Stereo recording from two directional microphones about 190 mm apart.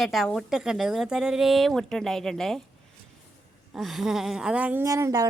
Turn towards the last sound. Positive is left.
turn(degrees=-15)  # may be behind; listen again after turning